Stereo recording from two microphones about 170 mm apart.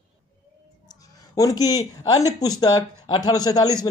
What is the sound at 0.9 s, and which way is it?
A woman's voice, 20° left (ahead or behind).